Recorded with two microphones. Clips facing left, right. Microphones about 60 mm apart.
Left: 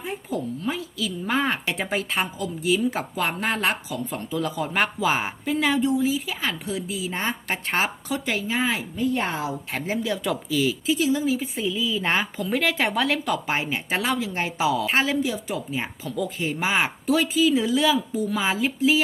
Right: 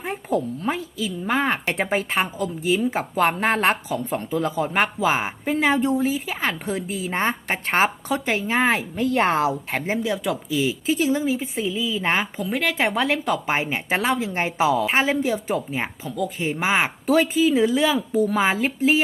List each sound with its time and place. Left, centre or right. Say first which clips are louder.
0.0 s a sound: right 5 dB; right
0.9 s a woman's voice: even; right
1.6 s a woman's voice: right 3 dB; right
7.4 s a woman's voice: right 4 dB; right
8.5 s speech: right 6 dB; right
9.0 s a woman's voice: right 5 dB; right
9.6 s a woman's voice: right 2 dB; right
10.8 s a woman's voice: right 3 dB; right; by 12.5 s centre
12.5 s speech: left 1 dB; centre
12.7 s a woman's voice: right 2 dB; right
18.1 s speech: right 5 dB; right